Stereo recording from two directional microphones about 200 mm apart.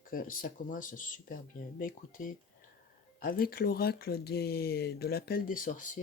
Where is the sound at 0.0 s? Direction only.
45° left (ahead or behind).